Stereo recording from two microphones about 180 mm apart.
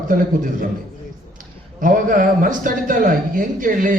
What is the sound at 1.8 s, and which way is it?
A man's voice, 50° right (ahead or behind).